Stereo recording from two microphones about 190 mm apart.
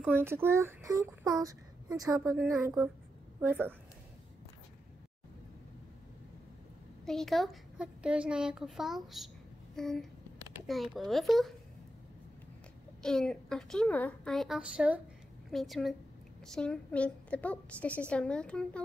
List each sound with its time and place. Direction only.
0.1 s a woman's voice: 10° right (ahead or behind)
7.1 s a woman's voice: centre (ahead or behind)
13.0 s a woman's voice: 5° left (ahead or behind)